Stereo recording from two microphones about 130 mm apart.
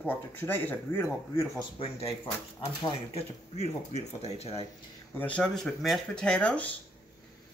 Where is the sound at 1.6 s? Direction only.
50° left (ahead or behind).